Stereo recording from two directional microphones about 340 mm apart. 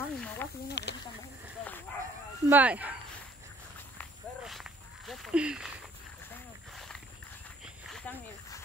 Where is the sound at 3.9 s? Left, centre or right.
Centre.